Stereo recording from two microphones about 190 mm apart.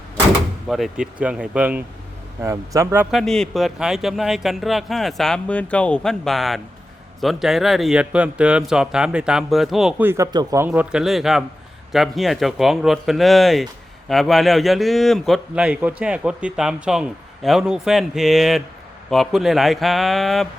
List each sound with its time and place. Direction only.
0.7 s a man's voice: 5° right (ahead or behind)
3.1 s a man's voice: centre (ahead or behind)
10.1 s a man's voice: 15° right (ahead or behind)
10.7 s a man's voice: 5° right (ahead or behind)